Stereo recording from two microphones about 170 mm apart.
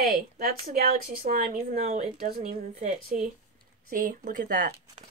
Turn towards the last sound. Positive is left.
turn(degrees=-55)  # may be behind; listen again after turning